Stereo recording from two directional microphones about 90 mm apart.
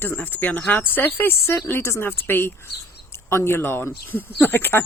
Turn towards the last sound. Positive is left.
turn(degrees=20)  # may be behind; listen again after turning